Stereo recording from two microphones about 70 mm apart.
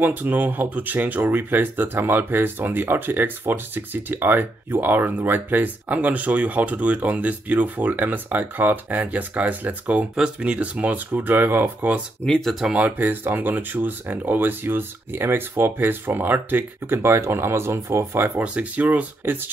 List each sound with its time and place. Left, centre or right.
0.0 s speech: right
12.3 s speech: centre
12.7 s speech: right
18.4 s speech: centre